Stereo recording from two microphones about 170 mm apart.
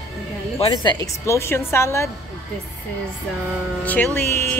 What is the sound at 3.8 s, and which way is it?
Speech, 10° left (ahead or behind).